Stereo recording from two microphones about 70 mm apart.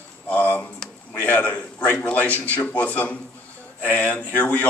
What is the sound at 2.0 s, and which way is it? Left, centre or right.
A man's voice, left.